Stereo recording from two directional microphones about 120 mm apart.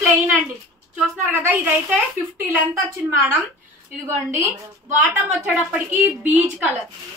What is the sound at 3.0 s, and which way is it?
A woman's voice, 15° right (ahead or behind).